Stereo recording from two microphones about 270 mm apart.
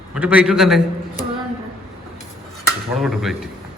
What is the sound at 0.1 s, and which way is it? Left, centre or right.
Speech, centre.